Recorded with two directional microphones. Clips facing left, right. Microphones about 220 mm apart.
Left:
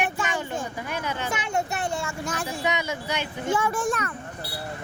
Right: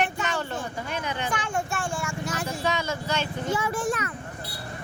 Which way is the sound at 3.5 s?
50° left (ahead or behind).